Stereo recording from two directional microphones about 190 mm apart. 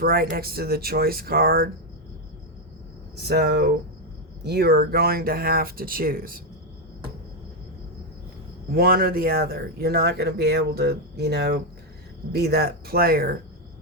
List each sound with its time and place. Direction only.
0.0 s speech: 50° right (ahead or behind)
3.2 s speech: 60° right (ahead or behind)
8.7 s speech: 55° right (ahead or behind)